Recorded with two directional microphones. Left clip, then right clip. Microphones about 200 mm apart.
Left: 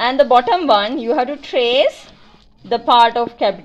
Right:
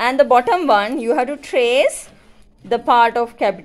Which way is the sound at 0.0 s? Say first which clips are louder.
Left 1 dB; 25° right (ahead or behind).